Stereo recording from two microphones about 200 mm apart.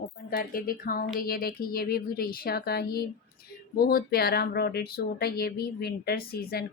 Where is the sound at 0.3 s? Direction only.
45° left (ahead or behind).